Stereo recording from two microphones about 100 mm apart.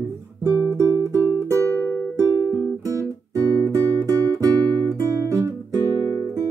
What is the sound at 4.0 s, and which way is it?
Music, 35° right (ahead or behind).